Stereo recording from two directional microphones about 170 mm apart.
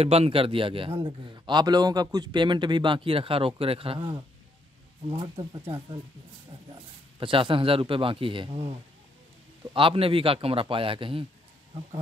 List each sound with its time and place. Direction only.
0.0 s a man's voice: 35° right (ahead or behind)
7.2 s a man's voice: 30° right (ahead or behind)
9.8 s a man's voice: 30° right (ahead or behind)